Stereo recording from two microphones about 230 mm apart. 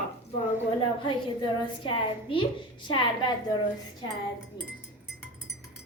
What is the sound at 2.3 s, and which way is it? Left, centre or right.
A woman's voice, left.